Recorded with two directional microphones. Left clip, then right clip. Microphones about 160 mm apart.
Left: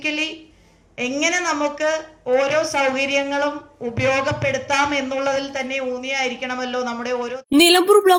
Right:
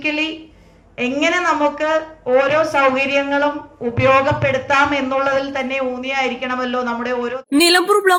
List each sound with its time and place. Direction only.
0.0 s speech: 50° left (ahead or behind)
7.5 s a woman's voice: 20° left (ahead or behind)